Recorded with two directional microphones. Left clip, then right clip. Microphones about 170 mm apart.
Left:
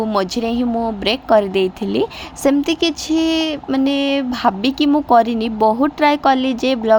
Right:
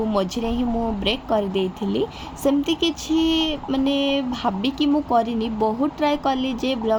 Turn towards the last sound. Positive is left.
turn(degrees=40)  # may be behind; listen again after turning